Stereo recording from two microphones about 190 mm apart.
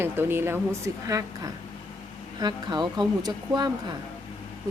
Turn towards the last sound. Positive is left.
turn(degrees=-20)  # may be behind; listen again after turning